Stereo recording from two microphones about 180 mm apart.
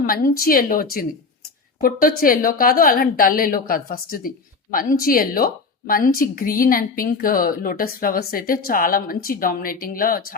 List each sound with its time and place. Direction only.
0.0 s a woman's voice: 55° left (ahead or behind)